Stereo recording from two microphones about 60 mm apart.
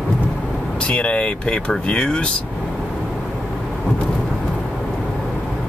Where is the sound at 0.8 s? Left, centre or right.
Centre.